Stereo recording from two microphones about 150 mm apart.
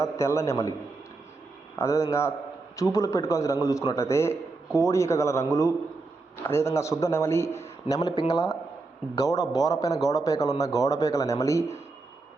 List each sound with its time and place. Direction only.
0.0 s a man's voice: 20° left (ahead or behind)
1.8 s a man's voice: 20° left (ahead or behind)